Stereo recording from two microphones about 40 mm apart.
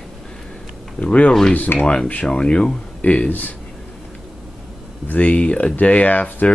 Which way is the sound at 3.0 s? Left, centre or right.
Left.